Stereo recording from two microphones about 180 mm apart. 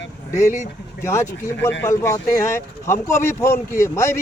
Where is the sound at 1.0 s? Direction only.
15° left (ahead or behind).